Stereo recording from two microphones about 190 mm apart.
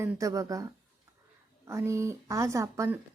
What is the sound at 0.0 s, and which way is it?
Speech, 15° right (ahead or behind).